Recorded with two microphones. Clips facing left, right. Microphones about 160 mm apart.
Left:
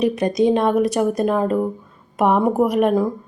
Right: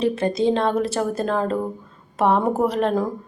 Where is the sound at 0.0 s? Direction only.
15° left (ahead or behind).